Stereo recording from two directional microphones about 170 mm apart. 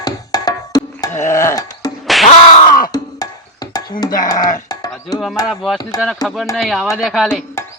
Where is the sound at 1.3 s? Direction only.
20° left (ahead or behind).